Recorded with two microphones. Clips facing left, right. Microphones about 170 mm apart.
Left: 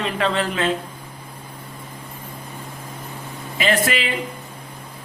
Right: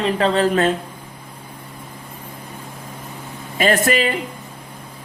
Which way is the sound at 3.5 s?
45° right (ahead or behind).